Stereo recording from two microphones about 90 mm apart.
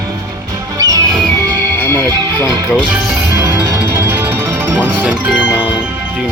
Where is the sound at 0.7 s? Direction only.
40° right (ahead or behind).